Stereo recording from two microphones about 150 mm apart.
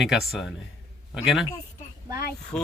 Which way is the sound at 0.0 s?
Centre (ahead or behind).